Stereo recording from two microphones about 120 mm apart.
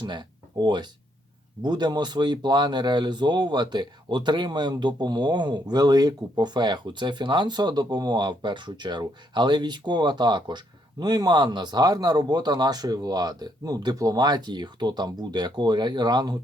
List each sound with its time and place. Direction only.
0.0 s speech: 40° right (ahead or behind)